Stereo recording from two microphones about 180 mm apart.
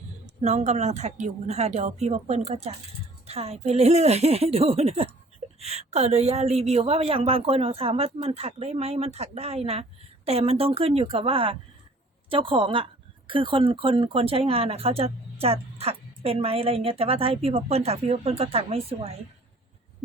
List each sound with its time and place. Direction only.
0.4 s speech: 40° right (ahead or behind)